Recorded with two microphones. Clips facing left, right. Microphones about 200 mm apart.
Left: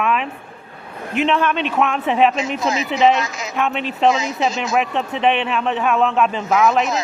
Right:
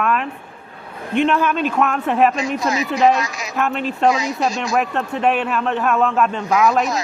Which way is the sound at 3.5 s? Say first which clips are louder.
Right 1 dB; centre (ahead or behind).